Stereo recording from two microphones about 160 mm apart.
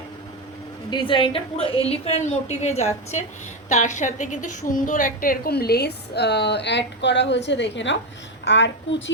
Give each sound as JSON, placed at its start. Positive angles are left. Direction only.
{"t": 0.9, "sound": "a woman's voice", "side_deg": 30}